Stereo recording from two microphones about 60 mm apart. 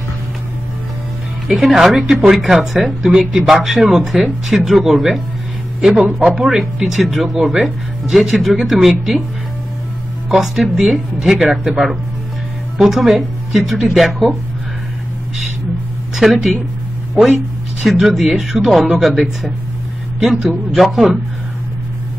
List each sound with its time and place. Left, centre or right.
1.5 s speech: centre
5.9 s speech: centre
6.2 s speech: centre
10.3 s speech: centre
16.2 s speech: centre